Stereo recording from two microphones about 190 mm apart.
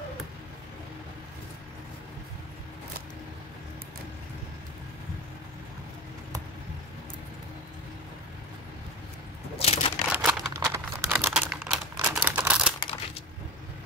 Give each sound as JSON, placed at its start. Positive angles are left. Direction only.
{"t": 9.6, "sound": "crumpling", "side_deg": 35}
{"t": 10.0, "sound": "crumpling", "side_deg": -10}